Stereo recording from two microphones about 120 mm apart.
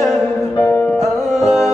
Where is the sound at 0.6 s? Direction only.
20° left (ahead or behind).